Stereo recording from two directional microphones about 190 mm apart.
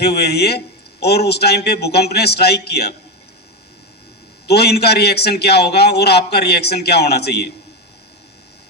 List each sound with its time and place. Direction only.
0.0 s a man's voice: 60° left (ahead or behind)
4.4 s a man's voice: 60° left (ahead or behind)